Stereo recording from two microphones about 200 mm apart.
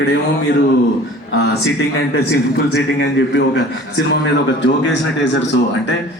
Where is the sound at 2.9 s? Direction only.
65° left (ahead or behind).